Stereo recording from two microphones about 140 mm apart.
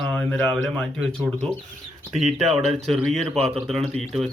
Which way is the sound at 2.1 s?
55° right (ahead or behind).